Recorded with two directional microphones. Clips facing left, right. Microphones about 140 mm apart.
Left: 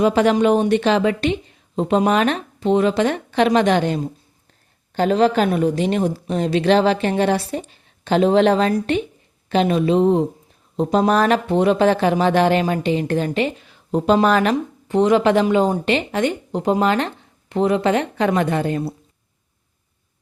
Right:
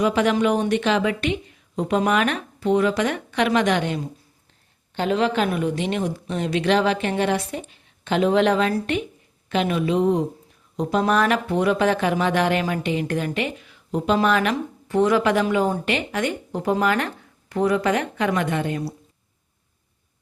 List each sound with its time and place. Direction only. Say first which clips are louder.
0.0 s a woman's voice: left 4 dB; 35° left (ahead or behind)
14.8 s a woman's voice: left 3 dB; 20° left (ahead or behind)